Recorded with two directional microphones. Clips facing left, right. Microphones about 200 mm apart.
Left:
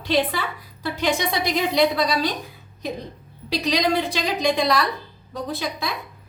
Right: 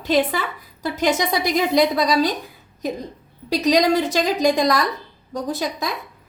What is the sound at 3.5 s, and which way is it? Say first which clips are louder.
A woman's voice: right 5 dB; 45° right (ahead or behind).